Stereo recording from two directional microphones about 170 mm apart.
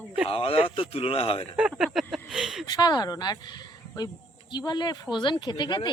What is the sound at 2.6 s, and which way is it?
Speech, 25° left (ahead or behind).